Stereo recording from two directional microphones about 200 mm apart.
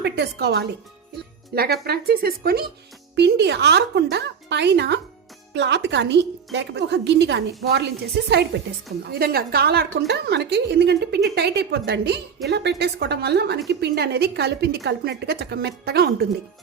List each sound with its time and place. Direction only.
0.0 s a woman's voice: 55° right (ahead or behind)